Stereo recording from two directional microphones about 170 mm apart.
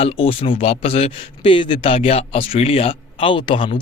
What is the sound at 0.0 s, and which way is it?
Speech, 35° left (ahead or behind).